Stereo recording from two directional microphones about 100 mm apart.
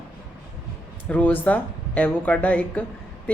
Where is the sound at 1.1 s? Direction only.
15° left (ahead or behind).